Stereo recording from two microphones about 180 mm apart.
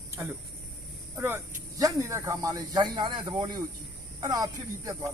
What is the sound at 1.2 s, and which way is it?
Speech, 15° right (ahead or behind).